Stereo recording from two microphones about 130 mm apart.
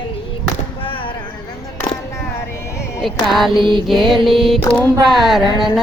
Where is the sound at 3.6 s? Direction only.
40° right (ahead or behind).